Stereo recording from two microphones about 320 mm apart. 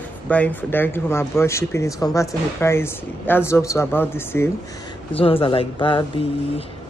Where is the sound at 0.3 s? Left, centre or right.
Centre.